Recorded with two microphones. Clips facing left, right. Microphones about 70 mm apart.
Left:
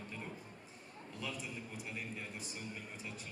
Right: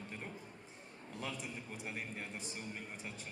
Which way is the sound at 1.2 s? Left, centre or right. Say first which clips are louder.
Even; right.